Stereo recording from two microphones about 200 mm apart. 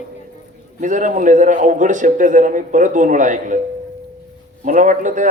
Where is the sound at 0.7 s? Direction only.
40° right (ahead or behind).